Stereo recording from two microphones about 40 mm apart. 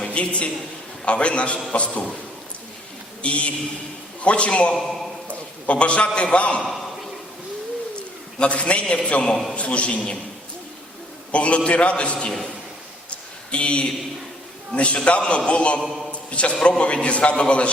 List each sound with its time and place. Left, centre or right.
0.0 s a man's voice: left
3.2 s a man's voice: left
4.8 s a man's voice: centre
5.6 s a man's voice: left
8.4 s a man's voice: left
11.3 s a man's voice: left
13.1 s a sound: left
14.7 s a man's voice: left
16.1 s a sound: left
16.6 s a man's voice: left